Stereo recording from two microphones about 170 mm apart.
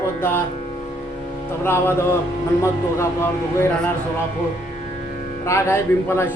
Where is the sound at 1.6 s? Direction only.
15° left (ahead or behind).